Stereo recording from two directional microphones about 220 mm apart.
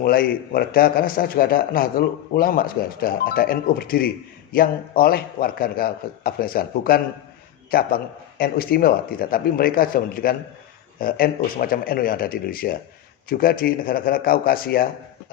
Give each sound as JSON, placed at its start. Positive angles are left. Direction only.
{"t": 0.0, "sound": "a man's voice", "side_deg": 45}